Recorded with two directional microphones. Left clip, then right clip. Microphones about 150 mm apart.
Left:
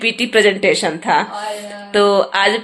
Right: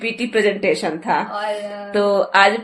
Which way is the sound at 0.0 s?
30° left (ahead or behind).